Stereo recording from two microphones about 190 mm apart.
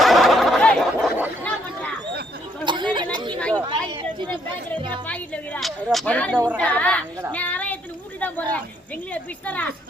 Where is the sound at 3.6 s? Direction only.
25° right (ahead or behind).